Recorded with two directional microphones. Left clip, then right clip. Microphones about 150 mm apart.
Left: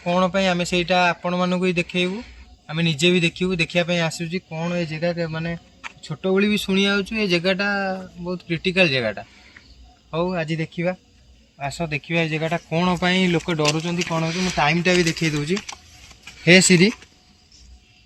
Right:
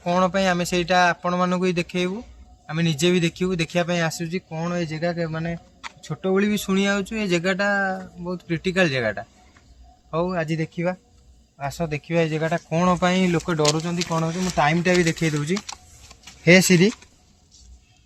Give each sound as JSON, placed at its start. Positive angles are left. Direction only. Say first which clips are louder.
{"t": 0.0, "sound": "speech", "louder": "left 1 dB", "side_deg": -5}
{"t": 6.5, "sound": "speech", "louder": "left 2 dB", "side_deg": -20}
{"t": 14.6, "sound": "speech", "louder": "even", "side_deg": -30}
{"t": 14.8, "sound": "speech", "louder": "left 1 dB", "side_deg": -45}
{"t": 16.2, "sound": "speech", "louder": "left 1 dB", "side_deg": -10}